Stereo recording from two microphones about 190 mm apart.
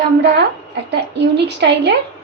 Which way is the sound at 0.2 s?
60° right (ahead or behind).